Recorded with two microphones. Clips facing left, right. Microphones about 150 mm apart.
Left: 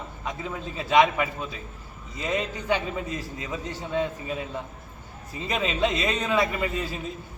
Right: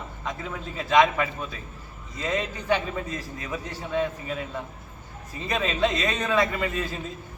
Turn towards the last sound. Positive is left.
turn(degrees=15)  # may be behind; listen again after turning